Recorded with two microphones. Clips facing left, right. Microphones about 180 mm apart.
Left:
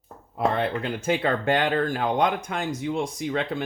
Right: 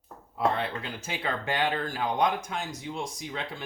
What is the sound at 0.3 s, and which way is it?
Speech, 55° left (ahead or behind).